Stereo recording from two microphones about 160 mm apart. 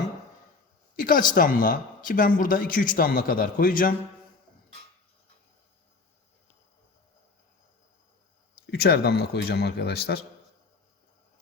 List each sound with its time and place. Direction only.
0.9 s speech: 60° left (ahead or behind)
8.6 s speech: 80° left